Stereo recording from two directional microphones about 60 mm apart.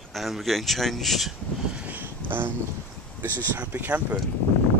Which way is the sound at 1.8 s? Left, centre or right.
Right.